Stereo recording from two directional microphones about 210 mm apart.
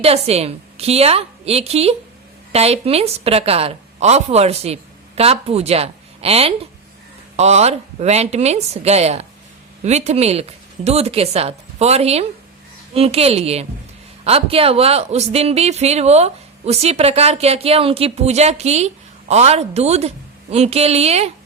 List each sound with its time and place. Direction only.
0.0 s a woman's voice: 30° right (ahead or behind)